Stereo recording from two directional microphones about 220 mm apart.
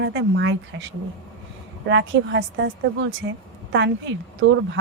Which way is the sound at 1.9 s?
55° right (ahead or behind).